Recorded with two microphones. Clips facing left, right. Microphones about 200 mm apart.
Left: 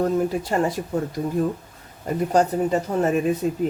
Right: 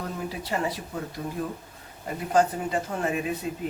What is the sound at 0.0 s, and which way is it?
Speech, 45° left (ahead or behind).